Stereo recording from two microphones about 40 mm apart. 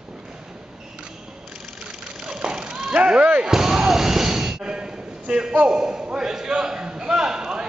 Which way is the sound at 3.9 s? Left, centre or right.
Centre.